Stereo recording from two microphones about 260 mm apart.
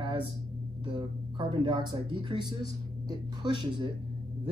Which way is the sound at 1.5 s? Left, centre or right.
Centre.